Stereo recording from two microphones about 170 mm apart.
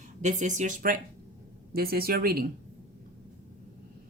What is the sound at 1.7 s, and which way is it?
Speech, 65° right (ahead or behind).